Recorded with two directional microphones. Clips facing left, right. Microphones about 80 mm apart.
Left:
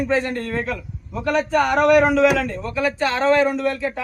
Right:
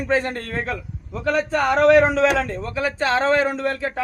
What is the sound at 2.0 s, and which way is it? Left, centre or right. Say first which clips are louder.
A man's voice: left 2 dB; right.